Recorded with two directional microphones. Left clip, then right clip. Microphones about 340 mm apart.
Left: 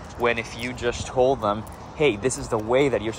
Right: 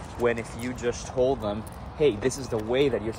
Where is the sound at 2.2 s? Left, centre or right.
Left.